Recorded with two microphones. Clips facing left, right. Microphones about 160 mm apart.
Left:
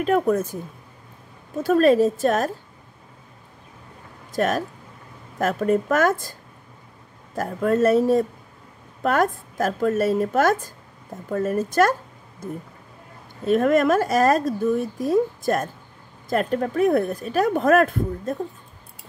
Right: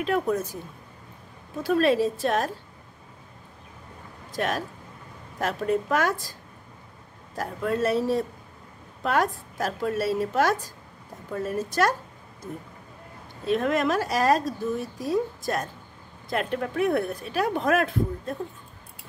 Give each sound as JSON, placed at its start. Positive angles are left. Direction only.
{"t": 0.0, "sound": "a woman's voice", "side_deg": 45}
{"t": 1.6, "sound": "a woman's voice", "side_deg": 45}
{"t": 4.3, "sound": "a woman's voice", "side_deg": 45}
{"t": 7.3, "sound": "a woman's voice", "side_deg": 45}
{"t": 13.5, "sound": "a woman's voice", "side_deg": 50}